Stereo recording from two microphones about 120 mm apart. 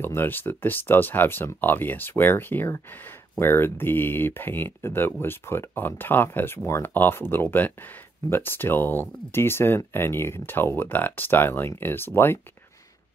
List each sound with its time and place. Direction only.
0.0 s speech: 20° left (ahead or behind)